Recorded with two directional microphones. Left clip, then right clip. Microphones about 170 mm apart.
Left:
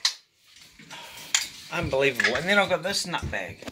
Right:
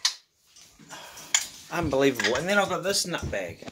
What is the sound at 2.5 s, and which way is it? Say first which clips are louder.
A man's voice: left 2 dB; 15° left (ahead or behind).